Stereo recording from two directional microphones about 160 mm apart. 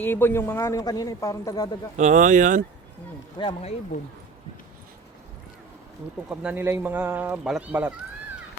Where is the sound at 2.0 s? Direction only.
50° right (ahead or behind).